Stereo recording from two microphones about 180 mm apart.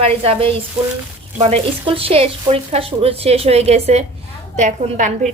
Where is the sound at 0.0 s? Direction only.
35° right (ahead or behind).